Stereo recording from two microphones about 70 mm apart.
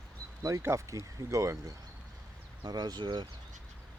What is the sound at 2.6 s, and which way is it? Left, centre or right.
Speech, right.